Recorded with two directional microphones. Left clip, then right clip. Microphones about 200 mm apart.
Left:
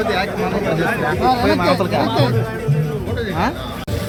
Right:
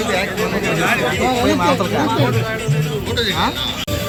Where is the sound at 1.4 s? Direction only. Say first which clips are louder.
Even; 50° left (ahead or behind).